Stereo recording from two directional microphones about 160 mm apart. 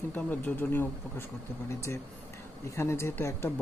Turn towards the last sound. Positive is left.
turn(degrees=15)  # may be behind; listen again after turning